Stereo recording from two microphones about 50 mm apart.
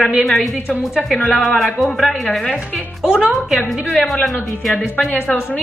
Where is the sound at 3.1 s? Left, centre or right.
Centre.